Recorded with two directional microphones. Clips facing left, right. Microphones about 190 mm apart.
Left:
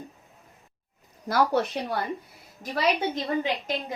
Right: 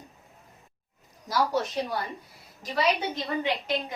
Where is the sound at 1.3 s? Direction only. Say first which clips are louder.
Left 3 dB; 60° left (ahead or behind).